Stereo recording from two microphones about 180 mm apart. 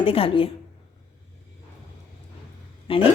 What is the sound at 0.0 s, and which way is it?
Speech, 30° left (ahead or behind).